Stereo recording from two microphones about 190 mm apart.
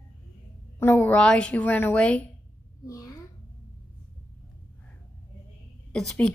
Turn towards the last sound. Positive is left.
turn(degrees=5)  # may be behind; listen again after turning